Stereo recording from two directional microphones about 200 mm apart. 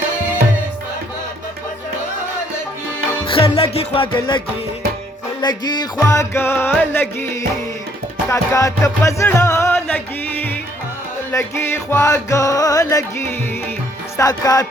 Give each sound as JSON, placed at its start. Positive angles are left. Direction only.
{"t": 3.2, "sound": "music", "side_deg": 25}
{"t": 8.3, "sound": "music", "side_deg": 15}